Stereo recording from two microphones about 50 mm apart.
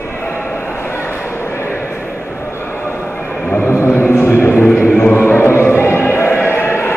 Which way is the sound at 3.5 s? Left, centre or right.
Left.